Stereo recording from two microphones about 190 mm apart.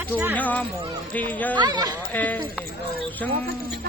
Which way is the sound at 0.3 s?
10° left (ahead or behind).